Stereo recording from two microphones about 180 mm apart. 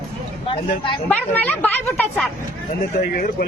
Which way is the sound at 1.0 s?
10° left (ahead or behind).